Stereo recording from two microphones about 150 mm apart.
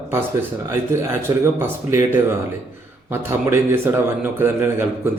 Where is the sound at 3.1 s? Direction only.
15° right (ahead or behind).